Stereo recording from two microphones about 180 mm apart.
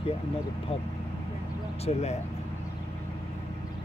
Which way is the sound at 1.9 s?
35° left (ahead or behind).